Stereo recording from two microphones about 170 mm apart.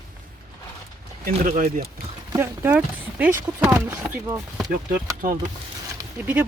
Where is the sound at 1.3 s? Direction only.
55° right (ahead or behind).